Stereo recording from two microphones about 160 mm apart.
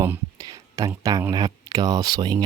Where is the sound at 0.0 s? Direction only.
20° right (ahead or behind).